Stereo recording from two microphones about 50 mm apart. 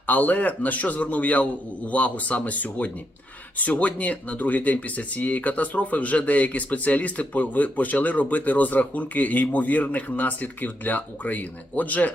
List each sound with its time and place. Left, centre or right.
0.1 s speech: left